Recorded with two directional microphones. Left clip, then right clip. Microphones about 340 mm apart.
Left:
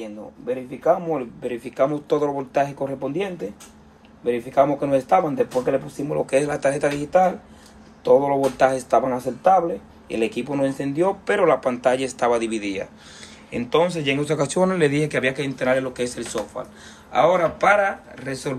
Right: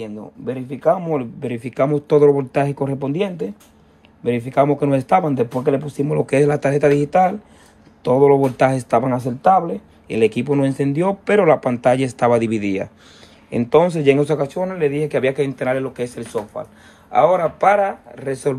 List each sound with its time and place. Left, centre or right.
0.5 s speech: right
14.4 s speech: centre